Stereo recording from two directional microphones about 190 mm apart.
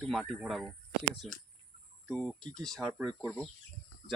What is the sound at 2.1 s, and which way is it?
Speech, 5° left (ahead or behind).